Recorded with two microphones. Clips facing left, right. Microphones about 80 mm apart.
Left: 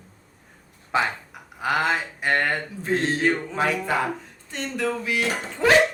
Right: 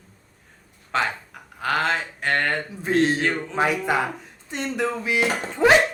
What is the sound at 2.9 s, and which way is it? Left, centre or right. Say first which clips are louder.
Speech: right 4 dB; centre.